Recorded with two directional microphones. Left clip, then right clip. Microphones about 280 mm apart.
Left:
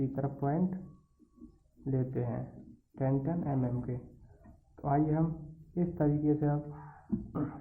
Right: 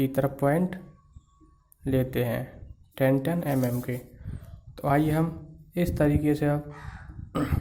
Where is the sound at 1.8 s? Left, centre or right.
Right.